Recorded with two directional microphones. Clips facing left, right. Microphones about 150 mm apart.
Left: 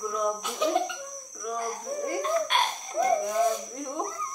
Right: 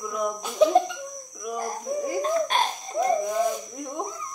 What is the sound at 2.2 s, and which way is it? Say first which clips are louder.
Laughter: right 2 dB; 35° right (ahead or behind).